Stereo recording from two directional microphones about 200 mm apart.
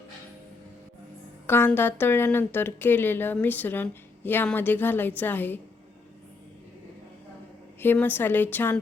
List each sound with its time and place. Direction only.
1.5 s speech: 10° left (ahead or behind)
7.8 s speech: 10° left (ahead or behind)